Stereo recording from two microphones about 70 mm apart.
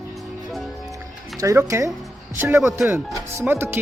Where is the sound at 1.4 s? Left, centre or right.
Right.